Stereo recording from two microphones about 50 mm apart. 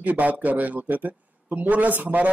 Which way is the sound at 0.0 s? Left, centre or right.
Right.